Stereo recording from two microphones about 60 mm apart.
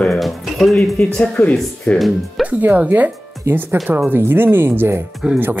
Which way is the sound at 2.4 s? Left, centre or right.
Right.